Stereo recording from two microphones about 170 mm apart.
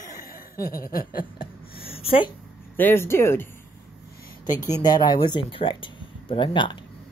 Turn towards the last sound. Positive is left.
turn(degrees=30)  # may be behind; listen again after turning